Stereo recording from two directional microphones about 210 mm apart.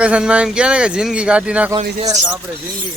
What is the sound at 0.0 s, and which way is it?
A man's voice, 5° right (ahead or behind).